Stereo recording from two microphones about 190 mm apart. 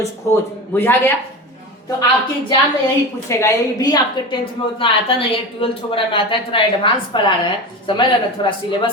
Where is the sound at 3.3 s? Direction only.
15° left (ahead or behind).